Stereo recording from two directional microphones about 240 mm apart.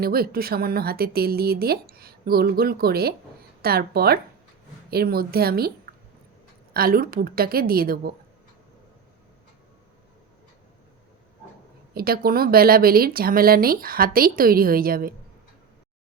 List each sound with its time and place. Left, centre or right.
0.0 s speech: right
11.9 s speech: right